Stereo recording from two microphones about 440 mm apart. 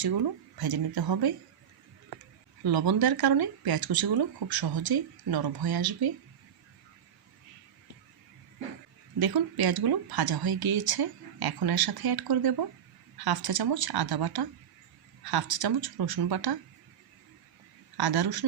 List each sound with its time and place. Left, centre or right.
0.0 s speech: right
2.6 s speech: right
9.1 s speech: right
17.9 s a woman's voice: right